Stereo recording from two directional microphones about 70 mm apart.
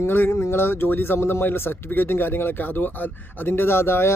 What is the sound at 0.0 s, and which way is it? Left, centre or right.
Speech, left.